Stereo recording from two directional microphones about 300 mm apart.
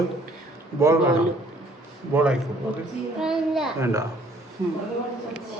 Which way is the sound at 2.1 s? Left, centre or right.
Centre.